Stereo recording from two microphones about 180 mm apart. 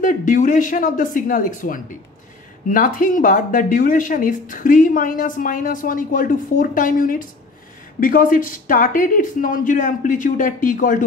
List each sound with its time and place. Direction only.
0.0 s speech: 45° left (ahead or behind)